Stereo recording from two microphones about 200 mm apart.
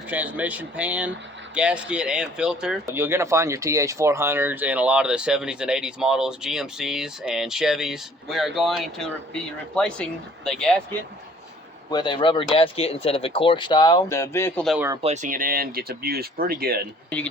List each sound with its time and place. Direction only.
0.1 s speech: 10° right (ahead or behind)
11.9 s speech: 20° left (ahead or behind); by 14.8 s 5° left (ahead or behind)
15.0 s speech: 35° right (ahead or behind)